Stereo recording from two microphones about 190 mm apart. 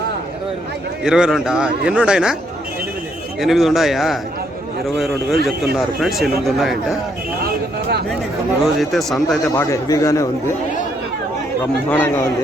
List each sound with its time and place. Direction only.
1.0 s a man's voice: 5° right (ahead or behind)
3.4 s a man's voice: centre (ahead or behind)
6.0 s a man's voice: centre (ahead or behind)
8.6 s a man's voice: centre (ahead or behind)
9.6 s a man's voice: 15° left (ahead or behind)
11.9 s a man's voice: 10° left (ahead or behind)